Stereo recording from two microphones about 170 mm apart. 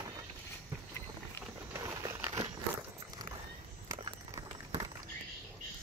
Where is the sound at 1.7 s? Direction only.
20° right (ahead or behind).